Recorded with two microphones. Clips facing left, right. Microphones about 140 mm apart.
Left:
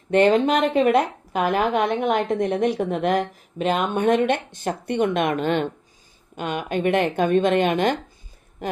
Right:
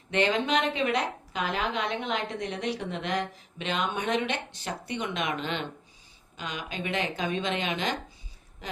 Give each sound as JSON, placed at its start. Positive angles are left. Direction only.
{"t": 0.1, "sound": "a woman's voice", "side_deg": 50}